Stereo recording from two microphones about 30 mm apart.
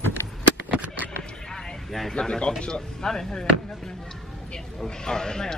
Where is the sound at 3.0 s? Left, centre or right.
Centre.